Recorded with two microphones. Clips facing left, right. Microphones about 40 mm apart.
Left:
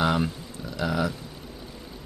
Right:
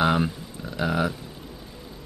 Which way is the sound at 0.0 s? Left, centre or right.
Centre.